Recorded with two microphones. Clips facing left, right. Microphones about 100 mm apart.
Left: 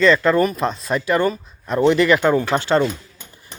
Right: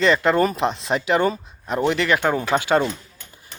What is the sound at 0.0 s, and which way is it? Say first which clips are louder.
Speech: left 2 dB; 20° right (ahead or behind).